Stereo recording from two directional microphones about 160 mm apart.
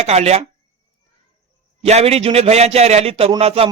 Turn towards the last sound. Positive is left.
turn(degrees=-40)  # may be behind; listen again after turning